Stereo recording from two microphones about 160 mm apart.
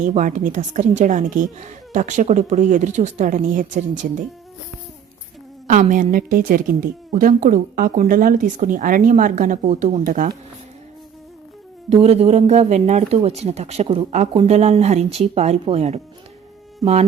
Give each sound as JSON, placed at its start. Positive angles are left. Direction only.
{"t": 0.0, "sound": "a woman's voice", "side_deg": -55}
{"t": 5.6, "sound": "speech", "side_deg": -50}
{"t": 11.9, "sound": "a woman's voice", "side_deg": -40}